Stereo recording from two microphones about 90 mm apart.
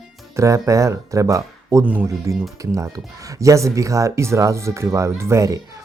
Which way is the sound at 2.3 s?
35° right (ahead or behind).